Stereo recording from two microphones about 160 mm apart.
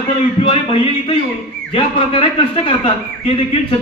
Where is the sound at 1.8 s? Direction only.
30° left (ahead or behind).